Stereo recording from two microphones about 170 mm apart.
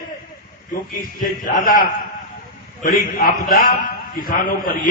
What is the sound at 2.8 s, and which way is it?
A man's voice, 55° left (ahead or behind).